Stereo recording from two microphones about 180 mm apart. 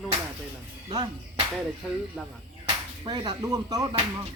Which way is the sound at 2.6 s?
25° right (ahead or behind).